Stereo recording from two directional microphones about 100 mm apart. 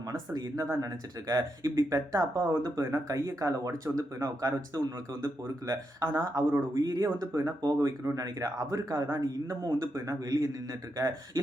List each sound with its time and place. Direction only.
0.1 s speech: 40° right (ahead or behind)